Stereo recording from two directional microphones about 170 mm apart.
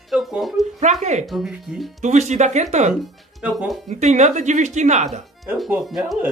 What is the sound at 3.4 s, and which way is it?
Speech, 5° right (ahead or behind).